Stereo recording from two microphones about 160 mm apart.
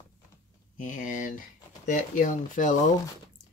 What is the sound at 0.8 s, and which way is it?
Speech, 55° left (ahead or behind).